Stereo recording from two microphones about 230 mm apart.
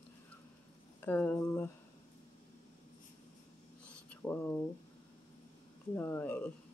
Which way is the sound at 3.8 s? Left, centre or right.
Centre.